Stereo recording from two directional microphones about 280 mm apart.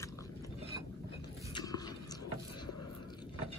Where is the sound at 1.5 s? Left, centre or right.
Centre.